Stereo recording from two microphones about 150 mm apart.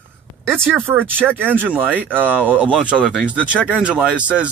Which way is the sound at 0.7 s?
15° right (ahead or behind).